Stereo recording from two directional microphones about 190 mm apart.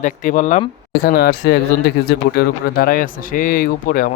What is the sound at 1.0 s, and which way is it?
A man's voice, 55° left (ahead or behind).